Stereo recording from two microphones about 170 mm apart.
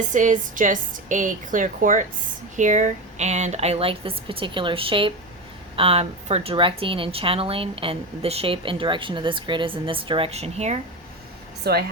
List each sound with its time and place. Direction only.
0.1 s a woman's voice: 50° right (ahead or behind)
11.6 s a woman's voice: 65° right (ahead or behind)